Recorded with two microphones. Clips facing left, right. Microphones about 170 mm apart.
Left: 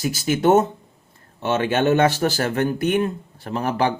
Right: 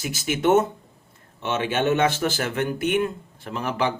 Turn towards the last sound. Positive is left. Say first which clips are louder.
# left 4 dB
turn(degrees=40)  # may be behind; listen again after turning